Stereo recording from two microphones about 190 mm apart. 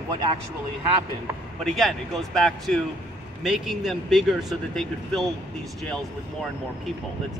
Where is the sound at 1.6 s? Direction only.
Centre (ahead or behind).